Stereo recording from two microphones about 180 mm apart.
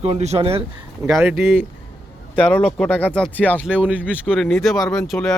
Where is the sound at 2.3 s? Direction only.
5° left (ahead or behind).